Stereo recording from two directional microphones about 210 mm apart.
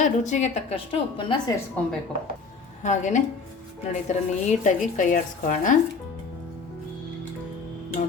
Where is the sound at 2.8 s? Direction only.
35° left (ahead or behind).